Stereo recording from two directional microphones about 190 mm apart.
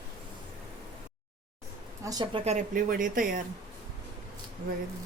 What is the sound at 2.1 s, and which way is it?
Speech, 20° right (ahead or behind).